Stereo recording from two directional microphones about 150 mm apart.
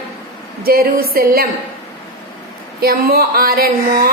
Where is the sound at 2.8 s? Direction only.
90° right.